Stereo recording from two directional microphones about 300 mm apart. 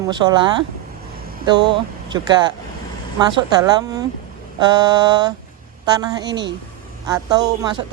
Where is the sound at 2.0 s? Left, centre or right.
Centre.